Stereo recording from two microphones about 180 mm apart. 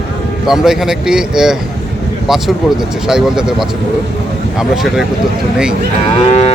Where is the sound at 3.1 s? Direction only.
5° right (ahead or behind).